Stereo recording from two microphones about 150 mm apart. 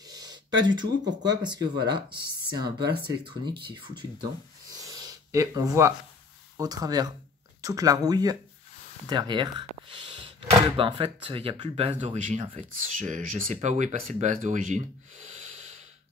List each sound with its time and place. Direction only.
0.1 s speech: 25° right (ahead or behind)
4.6 s a sound: 25° right (ahead or behind)
6.5 s speech: 25° right (ahead or behind); by 14.8 s 55° right (ahead or behind)